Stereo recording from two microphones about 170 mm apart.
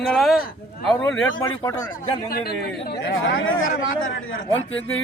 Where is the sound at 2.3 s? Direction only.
65° left (ahead or behind).